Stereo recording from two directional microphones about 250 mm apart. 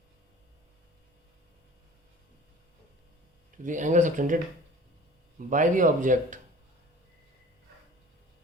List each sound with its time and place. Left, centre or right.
3.6 s speech: right
5.5 s speech: right